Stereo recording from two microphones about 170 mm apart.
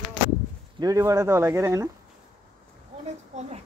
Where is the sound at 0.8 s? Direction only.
20° right (ahead or behind).